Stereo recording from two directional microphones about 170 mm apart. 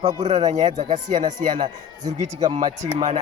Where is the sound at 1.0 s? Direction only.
25° right (ahead or behind).